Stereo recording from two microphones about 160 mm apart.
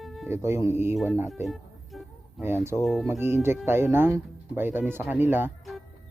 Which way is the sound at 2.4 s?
15° right (ahead or behind).